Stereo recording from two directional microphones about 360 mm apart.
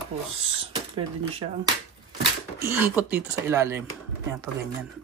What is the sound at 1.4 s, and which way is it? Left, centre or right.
Speech, centre.